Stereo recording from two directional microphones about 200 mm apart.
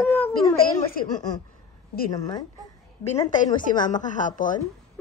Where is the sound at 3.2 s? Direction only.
40° left (ahead or behind).